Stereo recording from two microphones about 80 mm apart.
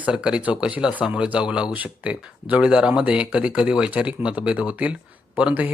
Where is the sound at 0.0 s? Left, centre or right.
Centre.